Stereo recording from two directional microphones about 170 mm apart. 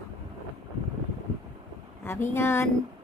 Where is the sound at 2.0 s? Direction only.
15° left (ahead or behind).